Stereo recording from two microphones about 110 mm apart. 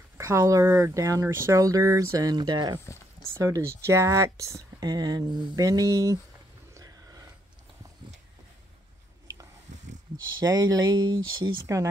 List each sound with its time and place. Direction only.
0.2 s speech: 30° right (ahead or behind)
3.3 s speech: 25° right (ahead or behind)
6.7 s a sound: 30° right (ahead or behind)
10.4 s speech: 35° right (ahead or behind)
11.6 s speech: 30° right (ahead or behind)